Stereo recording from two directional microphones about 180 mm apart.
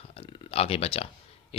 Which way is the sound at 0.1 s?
30° left (ahead or behind).